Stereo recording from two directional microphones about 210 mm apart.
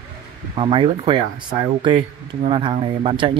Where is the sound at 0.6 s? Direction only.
25° right (ahead or behind).